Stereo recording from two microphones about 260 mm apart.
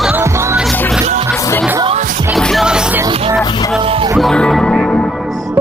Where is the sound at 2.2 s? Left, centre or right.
Centre.